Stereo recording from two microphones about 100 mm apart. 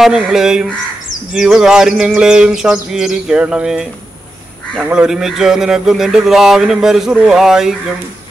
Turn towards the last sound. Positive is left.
turn(degrees=-5)  # may be behind; listen again after turning